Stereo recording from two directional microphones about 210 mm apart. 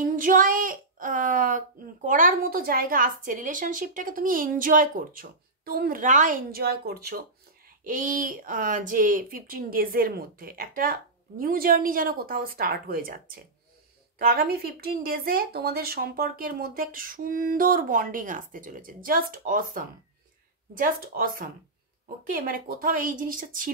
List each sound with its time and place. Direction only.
0.0 s speech: 40° right (ahead or behind)